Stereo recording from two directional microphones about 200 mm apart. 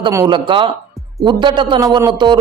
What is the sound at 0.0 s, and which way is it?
A man's voice, 20° right (ahead or behind).